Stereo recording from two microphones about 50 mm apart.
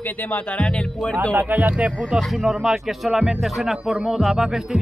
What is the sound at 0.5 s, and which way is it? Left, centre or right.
Music, left.